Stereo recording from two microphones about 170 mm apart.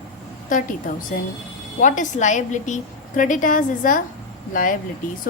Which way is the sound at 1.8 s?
45° left (ahead or behind).